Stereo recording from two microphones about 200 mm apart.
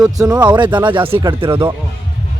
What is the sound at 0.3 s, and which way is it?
Speech, 20° right (ahead or behind).